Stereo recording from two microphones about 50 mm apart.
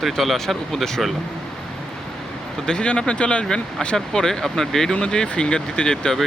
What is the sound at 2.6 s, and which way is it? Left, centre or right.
Speech, left.